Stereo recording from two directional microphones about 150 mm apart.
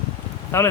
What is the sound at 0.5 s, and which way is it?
Speech, 15° left (ahead or behind).